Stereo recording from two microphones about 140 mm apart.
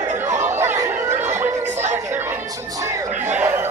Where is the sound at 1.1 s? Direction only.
55° right (ahead or behind).